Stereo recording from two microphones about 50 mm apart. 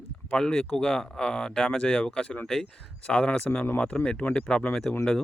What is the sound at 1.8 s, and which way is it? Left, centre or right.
Speech, left.